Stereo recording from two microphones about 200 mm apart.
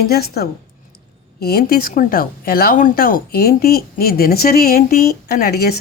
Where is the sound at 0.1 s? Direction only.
50° left (ahead or behind).